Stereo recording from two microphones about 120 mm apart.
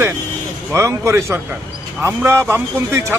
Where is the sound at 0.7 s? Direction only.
25° right (ahead or behind).